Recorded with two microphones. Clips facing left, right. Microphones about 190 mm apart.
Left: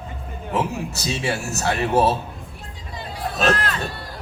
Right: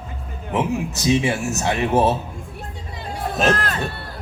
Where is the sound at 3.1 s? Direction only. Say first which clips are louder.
Right 1 dB; 45° right (ahead or behind).